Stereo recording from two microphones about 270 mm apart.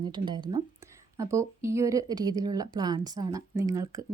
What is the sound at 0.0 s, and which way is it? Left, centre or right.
Speech, centre.